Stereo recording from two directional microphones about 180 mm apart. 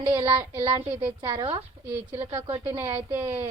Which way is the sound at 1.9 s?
10° right (ahead or behind).